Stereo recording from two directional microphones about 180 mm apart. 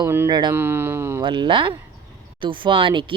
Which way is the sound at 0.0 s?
15° right (ahead or behind).